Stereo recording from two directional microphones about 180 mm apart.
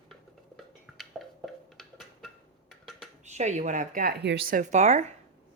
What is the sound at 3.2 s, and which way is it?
Speech, 40° right (ahead or behind).